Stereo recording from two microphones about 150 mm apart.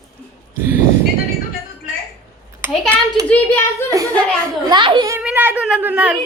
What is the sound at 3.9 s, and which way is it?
Speech, 20° right (ahead or behind).